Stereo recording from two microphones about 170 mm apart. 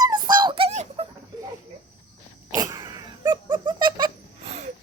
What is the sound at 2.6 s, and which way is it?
Wheeze, 25° right (ahead or behind).